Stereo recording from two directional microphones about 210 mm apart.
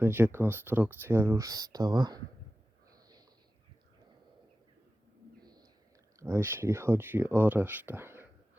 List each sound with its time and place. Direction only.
0.0 s speech: 10° right (ahead or behind)
2.9 s snort: 15° right (ahead or behind)
5.4 s a sound: 20° right (ahead or behind)
6.1 s speech: 10° right (ahead or behind)